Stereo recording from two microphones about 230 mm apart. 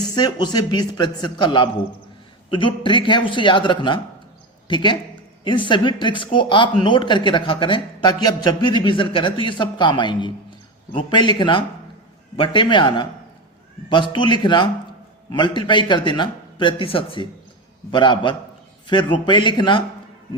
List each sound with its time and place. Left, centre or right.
0.1 s speech: centre